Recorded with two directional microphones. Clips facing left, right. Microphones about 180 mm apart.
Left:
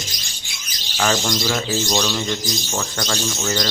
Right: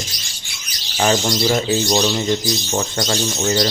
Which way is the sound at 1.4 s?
20° right (ahead or behind).